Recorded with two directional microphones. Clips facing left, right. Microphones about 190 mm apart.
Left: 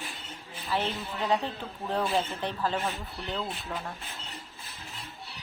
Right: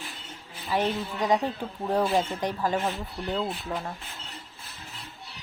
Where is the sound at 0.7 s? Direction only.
15° right (ahead or behind).